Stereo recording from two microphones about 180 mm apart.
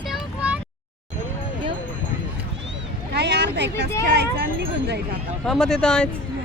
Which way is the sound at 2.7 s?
70° right (ahead or behind).